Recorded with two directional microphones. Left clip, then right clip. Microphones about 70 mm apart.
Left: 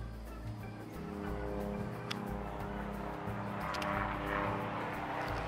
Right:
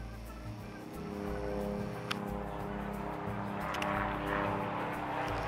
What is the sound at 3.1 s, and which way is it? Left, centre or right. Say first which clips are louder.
Music: right 2 dB; centre.